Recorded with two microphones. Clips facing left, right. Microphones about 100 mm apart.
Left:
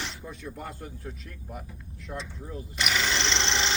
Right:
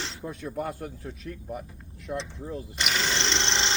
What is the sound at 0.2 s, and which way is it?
Speech, 45° right (ahead or behind).